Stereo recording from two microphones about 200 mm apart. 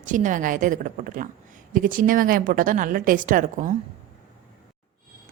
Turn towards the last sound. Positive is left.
turn(degrees=-40)  # may be behind; listen again after turning